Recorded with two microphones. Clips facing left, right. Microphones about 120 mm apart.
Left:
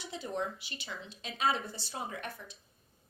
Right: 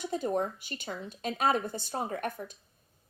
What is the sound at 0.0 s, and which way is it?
A woman's voice, 50° right (ahead or behind).